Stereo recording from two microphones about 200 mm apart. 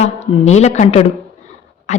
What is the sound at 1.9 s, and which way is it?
Dog, 35° left (ahead or behind).